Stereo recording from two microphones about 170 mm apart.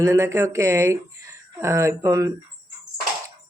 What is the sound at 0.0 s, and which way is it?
Speech, 15° right (ahead or behind).